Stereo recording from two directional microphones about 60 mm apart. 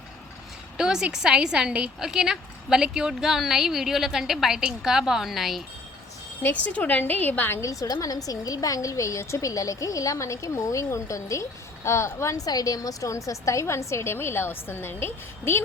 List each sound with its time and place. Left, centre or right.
0.8 s a woman's voice: centre
6.7 s a woman's voice: left
7.6 s a woman's voice: left
8.0 s a woman's voice: left